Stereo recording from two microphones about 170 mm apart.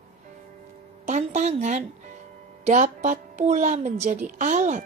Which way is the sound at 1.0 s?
45° right (ahead or behind).